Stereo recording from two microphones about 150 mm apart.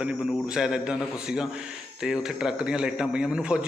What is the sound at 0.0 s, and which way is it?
A man's voice, 5° right (ahead or behind).